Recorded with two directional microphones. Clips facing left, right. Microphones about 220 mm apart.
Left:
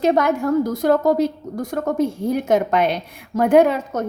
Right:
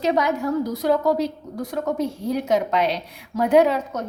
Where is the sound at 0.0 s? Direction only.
50° left (ahead or behind).